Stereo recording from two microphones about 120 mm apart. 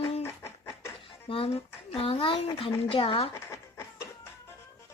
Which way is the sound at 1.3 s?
55° left (ahead or behind).